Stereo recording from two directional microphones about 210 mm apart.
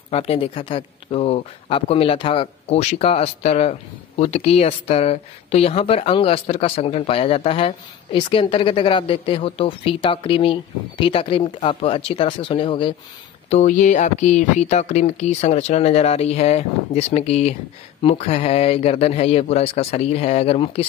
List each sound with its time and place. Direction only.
0.1 s speech: 25° left (ahead or behind)
13.5 s speech: 35° left (ahead or behind)